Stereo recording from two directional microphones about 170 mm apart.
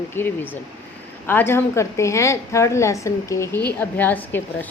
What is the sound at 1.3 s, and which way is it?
A woman's voice, 10° left (ahead or behind).